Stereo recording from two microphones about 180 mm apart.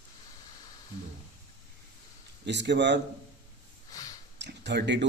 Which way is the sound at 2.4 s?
75° right (ahead or behind).